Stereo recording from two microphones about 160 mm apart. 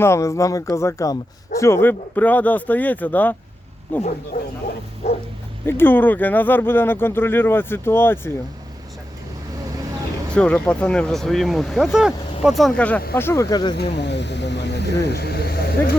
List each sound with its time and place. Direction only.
0.0 s speech: 15° left (ahead or behind)
5.6 s speech: 15° left (ahead or behind)
10.3 s speech: 5° left (ahead or behind); by 13.7 s 25° left (ahead or behind)
13.7 s speech: 90° left